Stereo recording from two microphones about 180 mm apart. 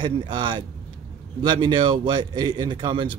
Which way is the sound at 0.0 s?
25° right (ahead or behind).